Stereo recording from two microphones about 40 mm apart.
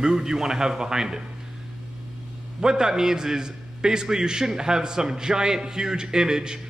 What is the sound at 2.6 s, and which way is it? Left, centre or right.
A man's voice, centre.